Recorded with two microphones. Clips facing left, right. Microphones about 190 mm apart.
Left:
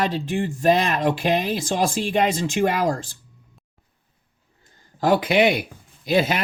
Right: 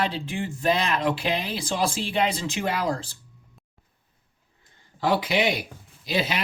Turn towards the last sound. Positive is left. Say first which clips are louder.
# left 6 dB
turn(degrees=50)  # may be behind; listen again after turning